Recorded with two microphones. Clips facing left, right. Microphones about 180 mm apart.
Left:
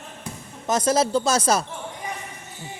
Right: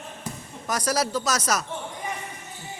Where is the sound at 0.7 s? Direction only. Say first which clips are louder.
Left 5 dB; 25° left (ahead or behind).